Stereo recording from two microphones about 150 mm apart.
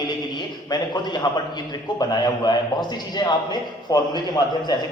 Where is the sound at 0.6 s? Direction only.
25° left (ahead or behind).